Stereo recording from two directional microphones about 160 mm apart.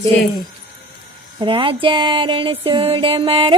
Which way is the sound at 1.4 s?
30° right (ahead or behind).